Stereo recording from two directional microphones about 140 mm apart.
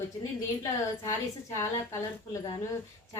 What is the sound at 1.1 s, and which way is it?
Speech, 20° left (ahead or behind).